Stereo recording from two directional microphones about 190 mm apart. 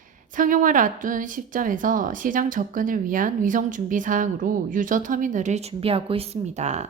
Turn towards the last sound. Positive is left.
turn(degrees=-35)  # may be behind; listen again after turning